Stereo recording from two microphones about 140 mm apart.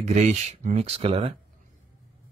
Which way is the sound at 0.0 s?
55° right (ahead or behind).